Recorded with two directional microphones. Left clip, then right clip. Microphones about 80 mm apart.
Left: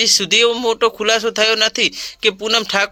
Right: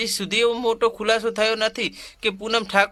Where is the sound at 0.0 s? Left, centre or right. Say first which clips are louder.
Left 8 dB; left.